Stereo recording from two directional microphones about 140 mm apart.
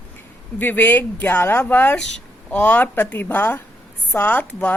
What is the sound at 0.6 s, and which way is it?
A woman's voice, 10° left (ahead or behind).